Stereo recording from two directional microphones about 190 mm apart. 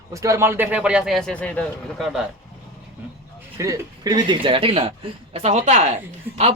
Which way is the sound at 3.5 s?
15° right (ahead or behind).